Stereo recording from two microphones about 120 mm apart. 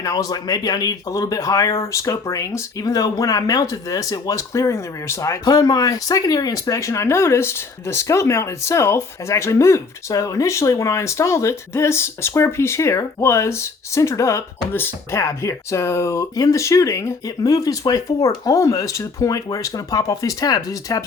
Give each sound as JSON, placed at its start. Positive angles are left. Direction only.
{"t": 0.0, "sound": "speech", "side_deg": 30}